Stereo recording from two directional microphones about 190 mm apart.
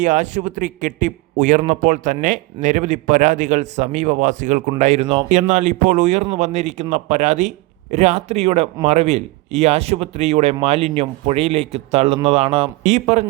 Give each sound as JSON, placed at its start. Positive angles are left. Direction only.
{"t": 0.0, "sound": "speech", "side_deg": -40}